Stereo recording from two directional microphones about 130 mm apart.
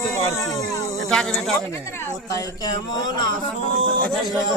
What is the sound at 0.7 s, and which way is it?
Cat, 25° left (ahead or behind).